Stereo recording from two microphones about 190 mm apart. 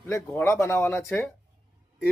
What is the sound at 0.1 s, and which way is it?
Speech, 15° left (ahead or behind).